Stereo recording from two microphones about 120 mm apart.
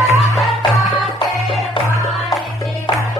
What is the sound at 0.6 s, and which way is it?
Music, 40° left (ahead or behind).